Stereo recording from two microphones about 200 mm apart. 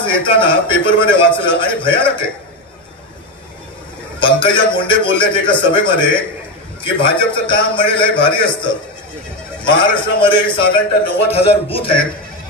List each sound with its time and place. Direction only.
0.0 s a man's voice: 25° left (ahead or behind)
4.2 s a man's voice: 25° left (ahead or behind)
9.9 s a man's voice: 25° left (ahead or behind)